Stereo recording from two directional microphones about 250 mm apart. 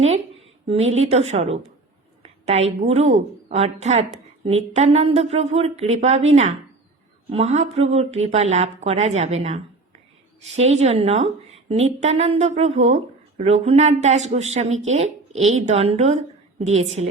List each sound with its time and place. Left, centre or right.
0.7 s a woman's voice: right